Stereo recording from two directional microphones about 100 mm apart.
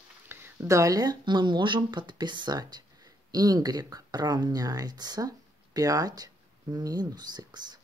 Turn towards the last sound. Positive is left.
turn(degrees=-45)  # may be behind; listen again after turning